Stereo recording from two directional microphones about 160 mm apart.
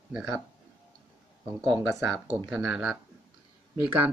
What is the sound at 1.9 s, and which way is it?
Speech, centre (ahead or behind).